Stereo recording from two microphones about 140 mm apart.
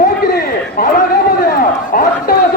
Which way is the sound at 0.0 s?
90° left.